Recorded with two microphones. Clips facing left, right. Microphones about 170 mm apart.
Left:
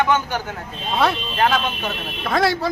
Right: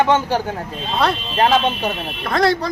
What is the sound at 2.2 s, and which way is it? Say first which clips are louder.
Speech: right 2 dB; 5° left (ahead or behind).